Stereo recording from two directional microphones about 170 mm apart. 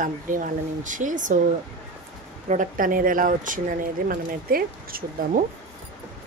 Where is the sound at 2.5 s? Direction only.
50° right (ahead or behind).